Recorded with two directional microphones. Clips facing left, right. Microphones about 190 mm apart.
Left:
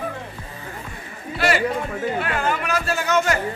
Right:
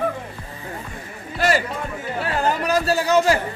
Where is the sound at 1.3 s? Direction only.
40° right (ahead or behind).